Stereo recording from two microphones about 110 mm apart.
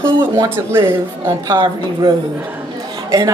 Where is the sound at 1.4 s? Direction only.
40° right (ahead or behind).